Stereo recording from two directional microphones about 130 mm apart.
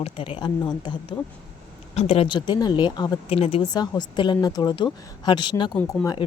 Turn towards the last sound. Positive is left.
turn(degrees=30)  # may be behind; listen again after turning